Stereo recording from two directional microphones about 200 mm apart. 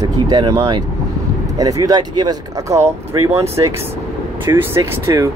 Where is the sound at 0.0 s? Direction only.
20° right (ahead or behind).